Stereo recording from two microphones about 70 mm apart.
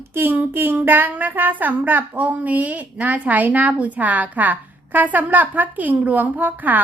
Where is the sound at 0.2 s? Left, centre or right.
Right.